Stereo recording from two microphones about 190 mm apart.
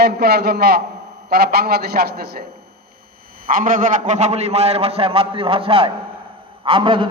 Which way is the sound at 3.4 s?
45° right (ahead or behind).